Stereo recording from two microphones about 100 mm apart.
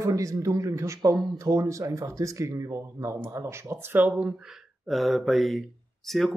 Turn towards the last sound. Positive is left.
turn(degrees=0)  # may be behind; listen again after turning